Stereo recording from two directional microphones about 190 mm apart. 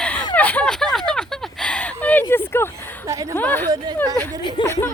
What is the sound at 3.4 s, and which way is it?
Speech, 10° left (ahead or behind).